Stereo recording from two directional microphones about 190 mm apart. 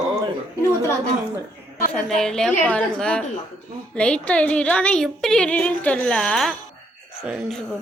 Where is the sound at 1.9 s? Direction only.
5° left (ahead or behind).